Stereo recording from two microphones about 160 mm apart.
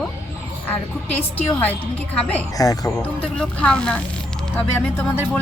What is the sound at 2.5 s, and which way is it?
Speech, 20° left (ahead or behind).